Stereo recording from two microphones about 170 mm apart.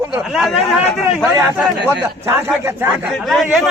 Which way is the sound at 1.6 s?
5° right (ahead or behind).